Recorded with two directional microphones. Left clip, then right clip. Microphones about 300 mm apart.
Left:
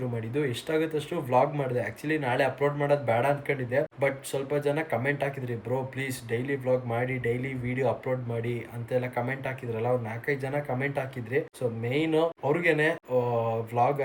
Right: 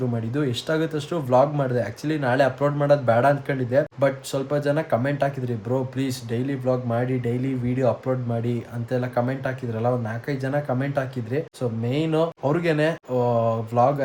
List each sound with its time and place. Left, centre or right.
0.3 s speech: centre